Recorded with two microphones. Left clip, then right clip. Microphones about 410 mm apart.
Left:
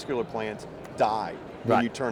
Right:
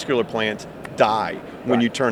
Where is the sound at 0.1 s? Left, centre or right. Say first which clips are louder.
Right 9 dB; right.